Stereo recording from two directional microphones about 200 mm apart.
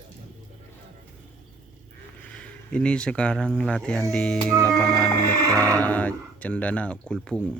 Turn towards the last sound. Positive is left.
turn(degrees=5)  # may be behind; listen again after turning